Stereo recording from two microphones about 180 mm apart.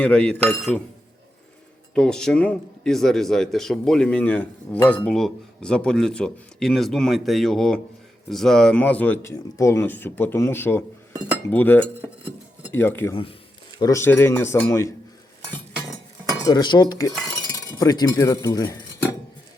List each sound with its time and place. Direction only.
0.0 s speech: 5° left (ahead or behind)
2.0 s speech: 5° left (ahead or behind)
16.5 s cutlery: 25° left (ahead or behind)
17.5 s speech: 20° left (ahead or behind)